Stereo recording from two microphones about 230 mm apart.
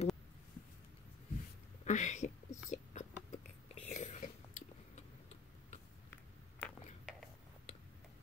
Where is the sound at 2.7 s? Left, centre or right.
Left.